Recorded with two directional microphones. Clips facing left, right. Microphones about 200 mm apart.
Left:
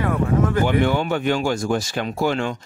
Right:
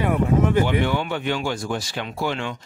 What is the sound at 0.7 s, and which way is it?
Speech, 45° left (ahead or behind).